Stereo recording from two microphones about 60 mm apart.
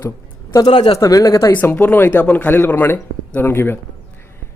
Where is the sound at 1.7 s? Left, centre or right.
Left.